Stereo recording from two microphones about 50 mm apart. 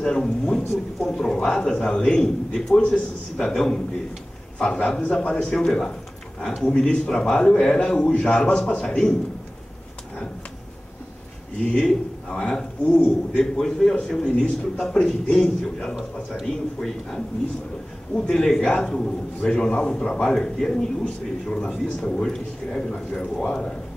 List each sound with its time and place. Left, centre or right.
0.0 s a man's voice: centre
4.6 s a man's voice: centre
11.7 s a man's voice: centre
16.8 s speech: centre
18.1 s a man's voice: centre